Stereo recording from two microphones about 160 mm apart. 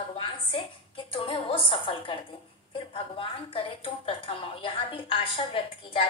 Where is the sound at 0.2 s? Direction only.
35° left (ahead or behind).